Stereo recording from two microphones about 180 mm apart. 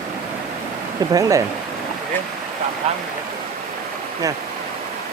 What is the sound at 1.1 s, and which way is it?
Speech, 20° right (ahead or behind).